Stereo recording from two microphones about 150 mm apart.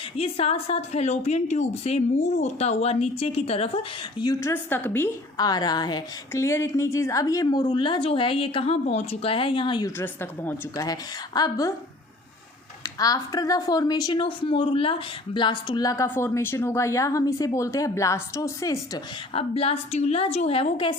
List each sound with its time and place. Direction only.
0.2 s a woman's voice: 40° left (ahead or behind)
4.2 s a woman's voice: 20° left (ahead or behind)
5.4 s speech: 25° left (ahead or behind)
10.0 s a woman's voice: 15° left (ahead or behind)
11.3 s speech: 25° left (ahead or behind)
12.8 s speech: 25° left (ahead or behind)
19.3 s a woman's voice: 40° left (ahead or behind)